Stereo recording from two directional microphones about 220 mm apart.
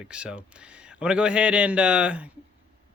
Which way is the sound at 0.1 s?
5° right (ahead or behind).